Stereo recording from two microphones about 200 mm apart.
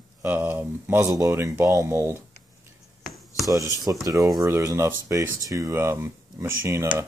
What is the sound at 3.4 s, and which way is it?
Speech, 15° right (ahead or behind).